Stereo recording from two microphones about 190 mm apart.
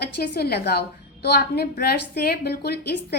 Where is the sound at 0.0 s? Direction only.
55° left (ahead or behind).